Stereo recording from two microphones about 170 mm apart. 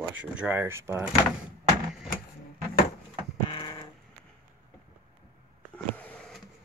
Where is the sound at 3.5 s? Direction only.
30° left (ahead or behind).